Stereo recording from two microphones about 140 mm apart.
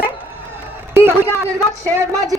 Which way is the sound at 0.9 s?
15° right (ahead or behind).